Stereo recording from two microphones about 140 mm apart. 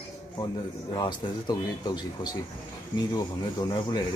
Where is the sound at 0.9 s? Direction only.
30° left (ahead or behind).